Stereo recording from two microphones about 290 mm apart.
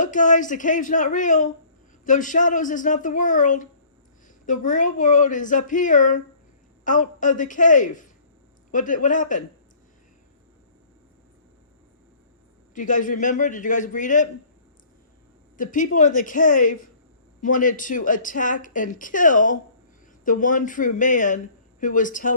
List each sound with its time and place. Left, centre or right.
0.0 s speech: left
12.7 s speech: left
15.5 s speech: left